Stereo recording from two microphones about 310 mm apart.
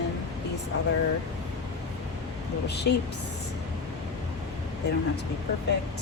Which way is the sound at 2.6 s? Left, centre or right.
Left.